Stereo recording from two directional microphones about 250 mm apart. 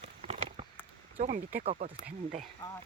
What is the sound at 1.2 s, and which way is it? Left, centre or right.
Speech, right.